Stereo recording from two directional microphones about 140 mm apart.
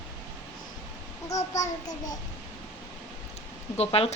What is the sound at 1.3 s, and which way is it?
Speech, 25° left (ahead or behind).